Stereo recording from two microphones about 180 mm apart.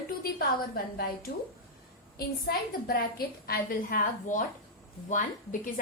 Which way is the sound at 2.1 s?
55° left (ahead or behind).